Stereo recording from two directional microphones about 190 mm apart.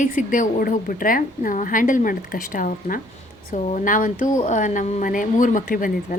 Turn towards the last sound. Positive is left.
turn(degrees=45)  # may be behind; listen again after turning